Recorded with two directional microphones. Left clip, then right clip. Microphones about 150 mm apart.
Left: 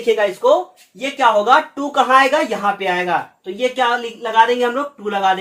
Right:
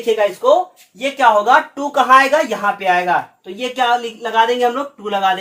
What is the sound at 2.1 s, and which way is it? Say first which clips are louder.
A man's voice: right 2 dB; 40° right (ahead or behind).